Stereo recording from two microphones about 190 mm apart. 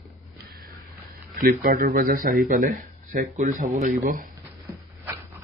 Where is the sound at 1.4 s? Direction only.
50° right (ahead or behind).